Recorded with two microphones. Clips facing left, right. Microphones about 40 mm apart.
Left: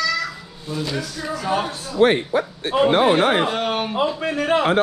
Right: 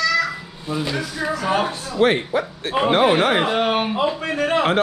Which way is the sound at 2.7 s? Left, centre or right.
Right.